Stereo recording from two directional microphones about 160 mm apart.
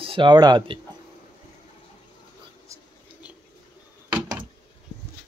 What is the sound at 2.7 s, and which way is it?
Whispering, 20° right (ahead or behind).